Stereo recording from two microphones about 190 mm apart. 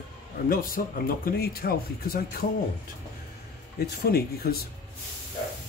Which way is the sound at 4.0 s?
55° left (ahead or behind).